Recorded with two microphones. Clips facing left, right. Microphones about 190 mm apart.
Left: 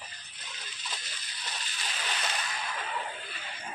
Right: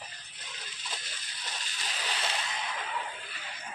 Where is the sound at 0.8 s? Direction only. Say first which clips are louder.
Even; 50° right (ahead or behind); by 2.8 s 20° right (ahead or behind).